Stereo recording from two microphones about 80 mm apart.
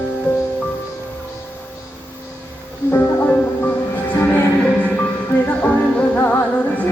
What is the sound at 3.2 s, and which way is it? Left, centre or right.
Music, left.